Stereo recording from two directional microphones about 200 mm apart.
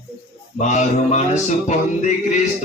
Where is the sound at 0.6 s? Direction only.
35° left (ahead or behind).